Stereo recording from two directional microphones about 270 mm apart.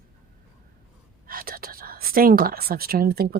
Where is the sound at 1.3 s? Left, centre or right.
Right.